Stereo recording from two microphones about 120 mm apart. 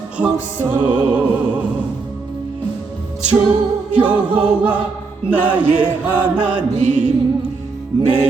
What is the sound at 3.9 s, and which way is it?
Choir, 10° right (ahead or behind).